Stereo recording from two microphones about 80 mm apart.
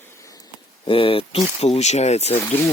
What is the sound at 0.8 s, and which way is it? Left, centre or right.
Speech, left.